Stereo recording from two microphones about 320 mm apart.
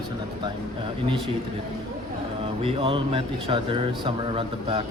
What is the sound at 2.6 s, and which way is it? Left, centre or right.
Speech, centre.